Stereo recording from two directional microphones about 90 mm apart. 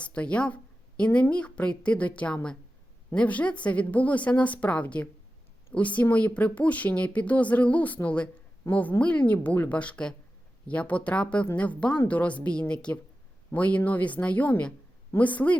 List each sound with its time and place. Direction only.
0.0 s a woman's voice: 15° left (ahead or behind)